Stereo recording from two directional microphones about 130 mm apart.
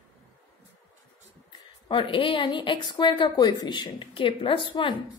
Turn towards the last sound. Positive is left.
turn(degrees=40)  # may be behind; listen again after turning